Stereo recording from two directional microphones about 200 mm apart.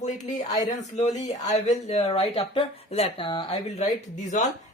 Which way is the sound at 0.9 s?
35° left (ahead or behind).